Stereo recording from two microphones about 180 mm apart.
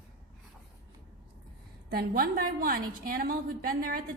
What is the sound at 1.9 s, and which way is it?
A woman's voice, 55° right (ahead or behind).